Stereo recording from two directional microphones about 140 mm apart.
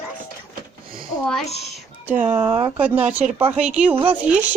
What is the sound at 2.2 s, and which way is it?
Speech, 25° right (ahead or behind).